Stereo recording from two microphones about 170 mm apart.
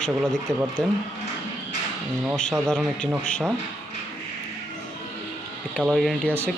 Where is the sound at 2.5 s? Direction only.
Centre (ahead or behind).